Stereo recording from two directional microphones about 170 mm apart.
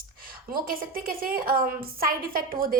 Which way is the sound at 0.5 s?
55° right (ahead or behind).